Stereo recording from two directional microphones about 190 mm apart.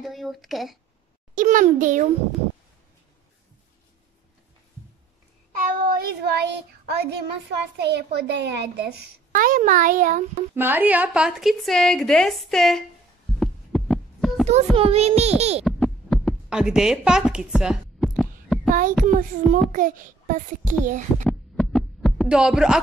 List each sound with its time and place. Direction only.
0.0 s a child's voice: centre (ahead or behind)
1.3 s a child's voice: 45° right (ahead or behind)
5.7 s child singing: 50° right (ahead or behind)
7.7 s a child's voice: 60° right (ahead or behind); by 10.2 s 45° right (ahead or behind)
10.5 s a woman's voice: 10° right (ahead or behind)
13.4 s heart sounds: 5° left (ahead or behind)
14.8 s a child's voice: 30° right (ahead or behind)
15.6 s heart sounds: centre (ahead or behind)
18.7 s a child's voice: 45° right (ahead or behind)
21.2 s heart sounds: 5° left (ahead or behind)